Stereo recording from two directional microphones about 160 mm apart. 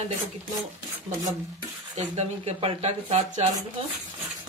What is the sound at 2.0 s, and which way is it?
Speech, 45° right (ahead or behind).